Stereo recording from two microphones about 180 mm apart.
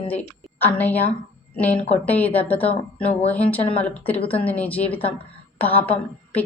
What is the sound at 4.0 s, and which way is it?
Speech, 30° left (ahead or behind).